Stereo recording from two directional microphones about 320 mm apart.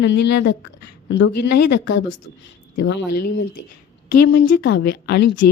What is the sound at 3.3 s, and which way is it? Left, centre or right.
Speech, left.